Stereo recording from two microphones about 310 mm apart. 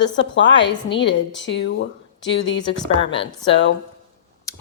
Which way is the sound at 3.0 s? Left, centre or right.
Centre.